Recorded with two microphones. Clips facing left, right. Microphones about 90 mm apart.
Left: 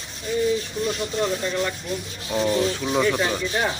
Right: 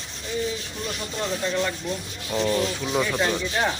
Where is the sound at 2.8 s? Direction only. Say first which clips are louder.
Left 2 dB; 5° left (ahead or behind).